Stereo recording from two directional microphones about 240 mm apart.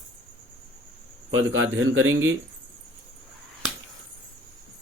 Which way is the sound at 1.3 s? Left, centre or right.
Right.